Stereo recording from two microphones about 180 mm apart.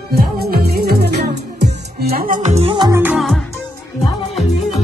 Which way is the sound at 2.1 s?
50° right (ahead or behind).